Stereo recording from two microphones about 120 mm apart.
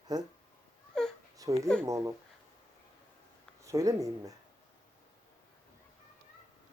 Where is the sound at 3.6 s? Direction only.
25° right (ahead or behind).